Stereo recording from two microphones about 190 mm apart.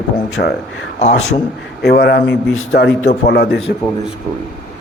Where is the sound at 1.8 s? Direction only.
55° left (ahead or behind); by 2.9 s 80° left.